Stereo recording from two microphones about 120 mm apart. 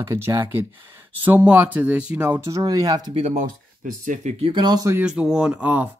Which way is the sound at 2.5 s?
30° right (ahead or behind).